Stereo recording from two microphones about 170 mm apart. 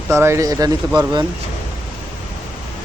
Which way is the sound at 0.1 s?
15° right (ahead or behind).